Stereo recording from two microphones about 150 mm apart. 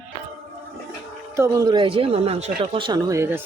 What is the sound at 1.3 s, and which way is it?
Speech, 20° right (ahead or behind).